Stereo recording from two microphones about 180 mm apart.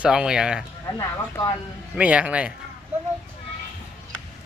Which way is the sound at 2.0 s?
5° right (ahead or behind).